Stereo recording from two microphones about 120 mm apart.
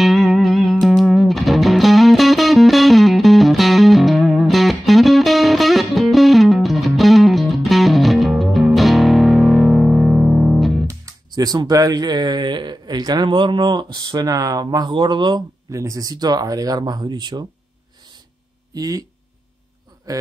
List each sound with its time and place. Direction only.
0.0 s music: centre (ahead or behind)
10.9 s speech: 30° right (ahead or behind)
18.7 s speech: 30° right (ahead or behind)
20.1 s a man's voice: 30° right (ahead or behind)